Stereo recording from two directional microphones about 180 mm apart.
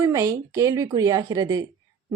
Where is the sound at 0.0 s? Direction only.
15° right (ahead or behind).